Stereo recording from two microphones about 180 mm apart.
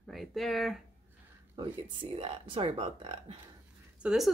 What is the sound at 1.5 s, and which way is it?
Speech, 25° right (ahead or behind).